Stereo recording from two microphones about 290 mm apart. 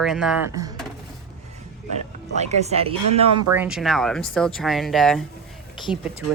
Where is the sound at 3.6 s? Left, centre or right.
Centre.